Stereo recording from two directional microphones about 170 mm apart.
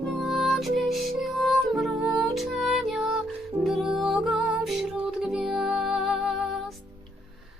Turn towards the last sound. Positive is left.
turn(degrees=0)  # may be behind; listen again after turning